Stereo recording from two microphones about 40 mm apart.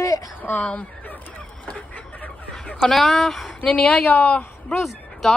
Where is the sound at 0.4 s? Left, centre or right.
Left.